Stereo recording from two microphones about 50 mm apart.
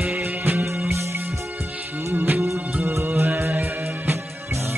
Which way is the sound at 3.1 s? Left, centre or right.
Right.